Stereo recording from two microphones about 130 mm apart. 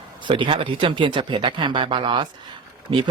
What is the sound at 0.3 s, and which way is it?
Speech, 40° right (ahead or behind).